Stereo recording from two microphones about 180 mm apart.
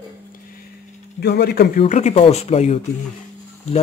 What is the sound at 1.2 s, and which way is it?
Speech, 65° left (ahead or behind).